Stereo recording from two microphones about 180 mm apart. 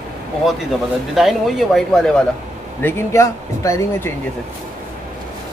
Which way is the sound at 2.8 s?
15° left (ahead or behind).